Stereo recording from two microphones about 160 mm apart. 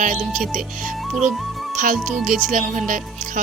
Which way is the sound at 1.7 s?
55° right (ahead or behind).